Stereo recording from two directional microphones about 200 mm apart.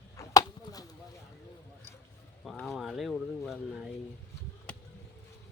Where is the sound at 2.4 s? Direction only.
Centre (ahead or behind).